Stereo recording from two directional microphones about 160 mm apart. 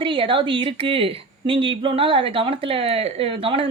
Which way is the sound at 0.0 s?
30° right (ahead or behind).